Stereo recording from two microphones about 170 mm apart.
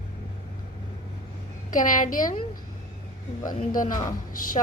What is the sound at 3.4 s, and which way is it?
A woman's voice, 50° left (ahead or behind).